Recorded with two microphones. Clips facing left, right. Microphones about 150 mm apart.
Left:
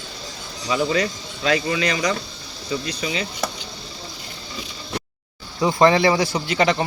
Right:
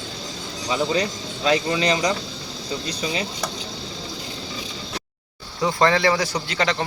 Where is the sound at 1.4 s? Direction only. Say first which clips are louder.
Right 1 dB; 30° right (ahead or behind).